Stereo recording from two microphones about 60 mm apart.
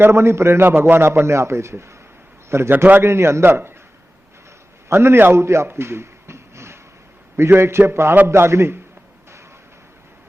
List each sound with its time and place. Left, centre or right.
0.0 s a man's voice: right
0.7 s a man's voice: right
2.7 s a man's voice: right
3.0 s a man's voice: right
4.9 s a man's voice: right
5.6 s a sound: right
7.5 s a man's voice: right